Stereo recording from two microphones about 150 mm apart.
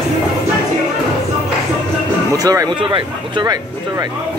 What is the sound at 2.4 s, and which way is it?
Speech, 25° right (ahead or behind).